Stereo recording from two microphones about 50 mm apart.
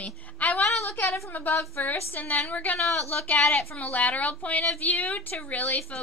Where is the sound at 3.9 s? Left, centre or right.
Left.